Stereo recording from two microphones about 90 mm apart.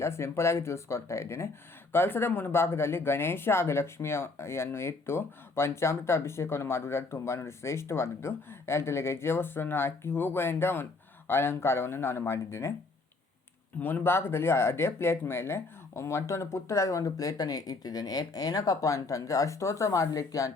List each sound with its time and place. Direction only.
0.0 s speech: 30° left (ahead or behind)
13.8 s speech: 25° left (ahead or behind); by 20.5 s 40° left (ahead or behind)